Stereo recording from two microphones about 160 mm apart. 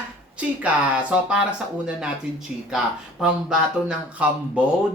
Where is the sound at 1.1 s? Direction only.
5° right (ahead or behind).